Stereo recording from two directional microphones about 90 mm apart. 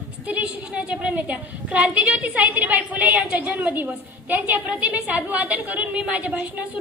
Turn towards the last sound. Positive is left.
turn(degrees=-15)  # may be behind; listen again after turning